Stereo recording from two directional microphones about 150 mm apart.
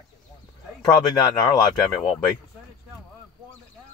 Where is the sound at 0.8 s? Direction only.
30° left (ahead or behind).